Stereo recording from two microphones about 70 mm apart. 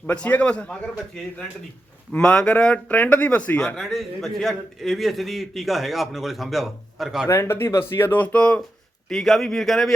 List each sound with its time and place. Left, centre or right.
0.1 s a man's voice: centre
3.8 s a man's voice: centre
7.3 s speech: left
7.5 s speech: left; by 8.6 s centre
9.0 s a man's voice: centre